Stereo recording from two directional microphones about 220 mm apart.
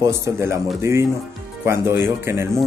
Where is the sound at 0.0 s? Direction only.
15° right (ahead or behind).